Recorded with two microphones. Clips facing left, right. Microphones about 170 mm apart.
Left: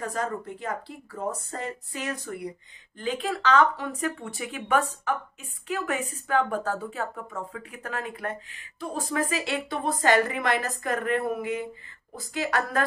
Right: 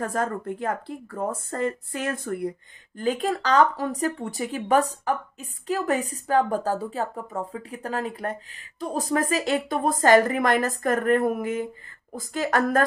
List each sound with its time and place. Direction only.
0.0 s speech: 50° right (ahead or behind)